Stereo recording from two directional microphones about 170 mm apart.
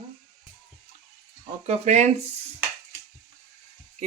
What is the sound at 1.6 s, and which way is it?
Speech, 40° right (ahead or behind).